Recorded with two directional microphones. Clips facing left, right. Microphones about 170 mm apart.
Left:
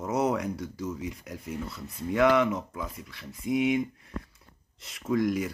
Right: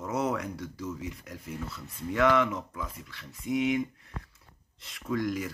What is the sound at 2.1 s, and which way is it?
Speech, 15° left (ahead or behind).